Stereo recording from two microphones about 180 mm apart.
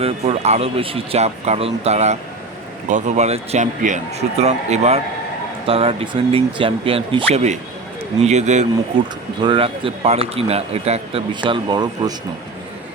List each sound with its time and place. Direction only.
0.0 s speech: 35° right (ahead or behind)
9.4 s speech: 30° right (ahead or behind)